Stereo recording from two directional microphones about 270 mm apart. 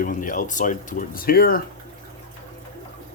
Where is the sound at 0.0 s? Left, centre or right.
Left.